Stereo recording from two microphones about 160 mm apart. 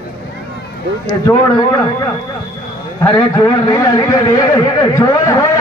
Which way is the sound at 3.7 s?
25° left (ahead or behind).